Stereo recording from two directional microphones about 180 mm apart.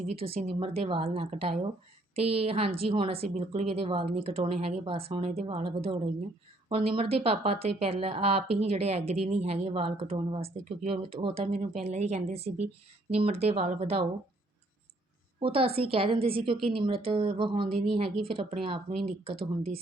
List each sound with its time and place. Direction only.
0.1 s speech: 35° right (ahead or behind)
15.4 s speech: 30° right (ahead or behind)